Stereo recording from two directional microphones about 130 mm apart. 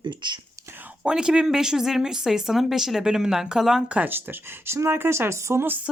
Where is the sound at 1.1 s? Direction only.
5° right (ahead or behind).